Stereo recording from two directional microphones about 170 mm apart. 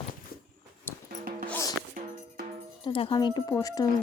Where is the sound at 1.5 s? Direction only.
20° left (ahead or behind).